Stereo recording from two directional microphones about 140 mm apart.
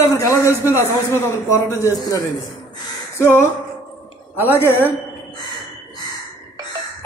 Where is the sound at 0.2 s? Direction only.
20° left (ahead or behind).